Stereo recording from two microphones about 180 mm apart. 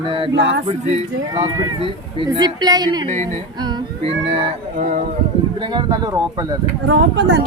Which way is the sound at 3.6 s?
30° right (ahead or behind).